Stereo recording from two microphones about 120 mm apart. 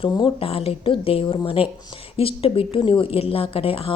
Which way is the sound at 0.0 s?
50° left (ahead or behind).